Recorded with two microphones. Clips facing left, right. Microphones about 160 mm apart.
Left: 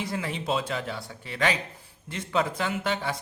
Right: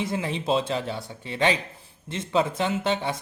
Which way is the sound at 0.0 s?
20° right (ahead or behind).